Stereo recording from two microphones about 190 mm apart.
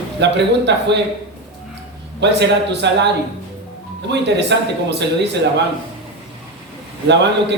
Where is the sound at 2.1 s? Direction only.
65° right (ahead or behind).